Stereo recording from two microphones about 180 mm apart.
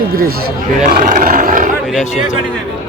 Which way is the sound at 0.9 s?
50° right (ahead or behind).